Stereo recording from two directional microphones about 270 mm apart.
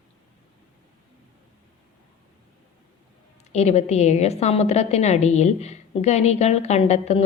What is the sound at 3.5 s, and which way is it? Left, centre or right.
A woman's voice, left.